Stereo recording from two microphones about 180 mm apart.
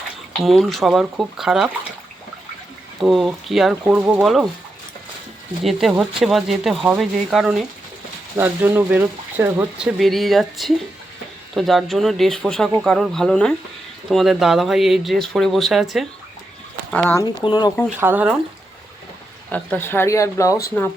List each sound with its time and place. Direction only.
0.4 s speech: centre (ahead or behind)
3.0 s speech: centre (ahead or behind)
5.6 s speech: centre (ahead or behind)
17.4 s speech: 25° left (ahead or behind)
17.8 s speech: 10° right (ahead or behind)
19.5 s speech: 10° left (ahead or behind)